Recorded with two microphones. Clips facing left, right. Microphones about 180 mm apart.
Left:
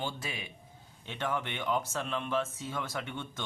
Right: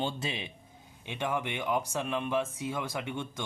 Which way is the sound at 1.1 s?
10° right (ahead or behind).